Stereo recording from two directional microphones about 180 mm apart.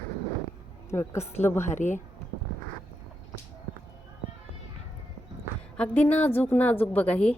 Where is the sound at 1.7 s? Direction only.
45° left (ahead or behind).